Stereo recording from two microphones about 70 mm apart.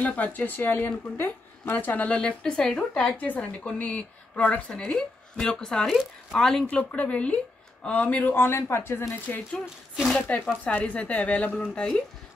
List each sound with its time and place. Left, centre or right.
0.0 s speech: left
9.3 s speech: left